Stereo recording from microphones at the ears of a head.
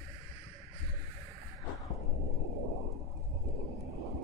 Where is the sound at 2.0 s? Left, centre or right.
Right.